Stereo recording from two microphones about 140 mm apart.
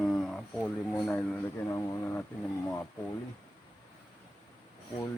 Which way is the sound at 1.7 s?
20° left (ahead or behind).